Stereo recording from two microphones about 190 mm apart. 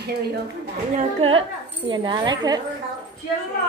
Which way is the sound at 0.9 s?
30° right (ahead or behind).